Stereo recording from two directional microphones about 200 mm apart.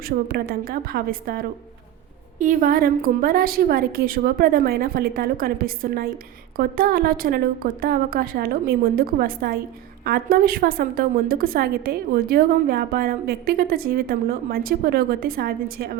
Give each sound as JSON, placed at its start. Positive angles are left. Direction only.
{"t": 0.3, "sound": "a woman's voice", "side_deg": -50}